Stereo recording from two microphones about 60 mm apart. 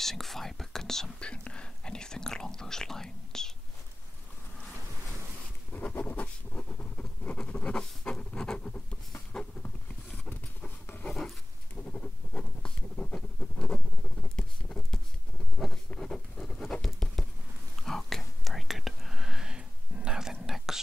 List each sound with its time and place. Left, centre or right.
0.0 s whispering: centre
1.2 s whispering: centre
5.7 s a sound: left; by 8.8 s centre
11.7 s goat: left
13.1 s scratch: centre
14.3 s patter: centre
17.7 s whispering: centre